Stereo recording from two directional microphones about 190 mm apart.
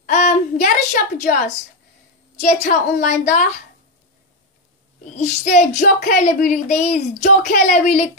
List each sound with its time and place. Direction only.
0.0 s a sound: 40° left (ahead or behind)
2.4 s a woman's voice: 40° left (ahead or behind)
5.1 s a woman's voice: 35° left (ahead or behind)